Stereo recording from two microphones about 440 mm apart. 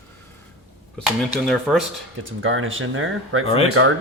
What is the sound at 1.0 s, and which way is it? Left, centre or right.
Speech, centre.